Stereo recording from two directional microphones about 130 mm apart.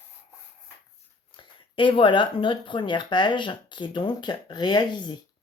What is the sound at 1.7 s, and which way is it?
Speech, 40° left (ahead or behind).